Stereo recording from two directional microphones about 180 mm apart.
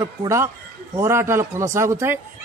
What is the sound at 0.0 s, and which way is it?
Speech, 15° right (ahead or behind).